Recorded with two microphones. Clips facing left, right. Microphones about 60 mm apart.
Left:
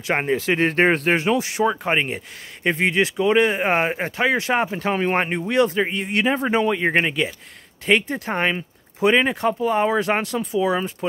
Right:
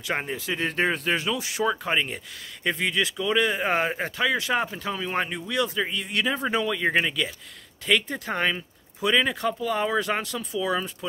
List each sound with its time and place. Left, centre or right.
0.0 s speech: left
0.3 s speech: left
10.6 s speech: left